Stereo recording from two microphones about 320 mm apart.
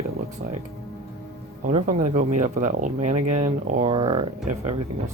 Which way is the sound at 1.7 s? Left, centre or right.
Right.